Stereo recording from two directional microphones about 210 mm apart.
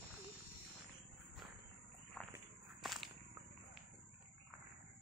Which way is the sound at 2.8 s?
Centre (ahead or behind).